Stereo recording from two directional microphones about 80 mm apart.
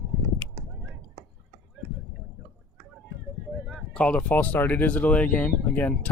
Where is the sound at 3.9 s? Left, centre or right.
Centre.